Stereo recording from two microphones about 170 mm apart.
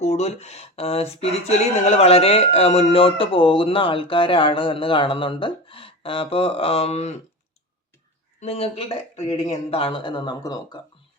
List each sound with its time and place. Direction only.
0.0 s speech: 40° left (ahead or behind)
8.4 s speech: 35° left (ahead or behind)